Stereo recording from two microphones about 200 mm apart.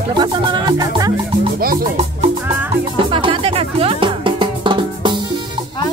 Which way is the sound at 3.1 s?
25° right (ahead or behind).